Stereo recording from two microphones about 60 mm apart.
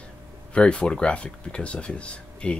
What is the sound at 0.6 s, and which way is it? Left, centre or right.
Speech, centre.